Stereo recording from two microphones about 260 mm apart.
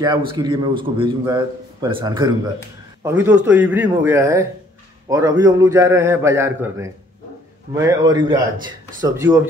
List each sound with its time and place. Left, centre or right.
0.4 s a man's voice: centre